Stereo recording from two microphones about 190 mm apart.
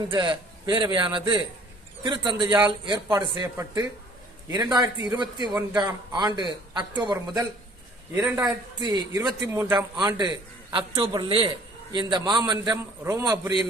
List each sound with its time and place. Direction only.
0.1 s a man's voice: 25° right (ahead or behind)